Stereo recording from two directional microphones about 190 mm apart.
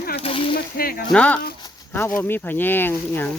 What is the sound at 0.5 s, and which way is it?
Speech, 50° left (ahead or behind).